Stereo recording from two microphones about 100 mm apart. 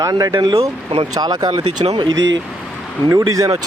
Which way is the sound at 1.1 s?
40° right (ahead or behind).